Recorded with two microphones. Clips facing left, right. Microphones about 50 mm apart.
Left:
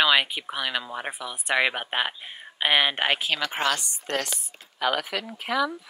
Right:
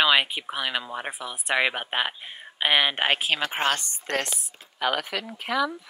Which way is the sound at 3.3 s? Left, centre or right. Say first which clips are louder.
Right 1 dB; right.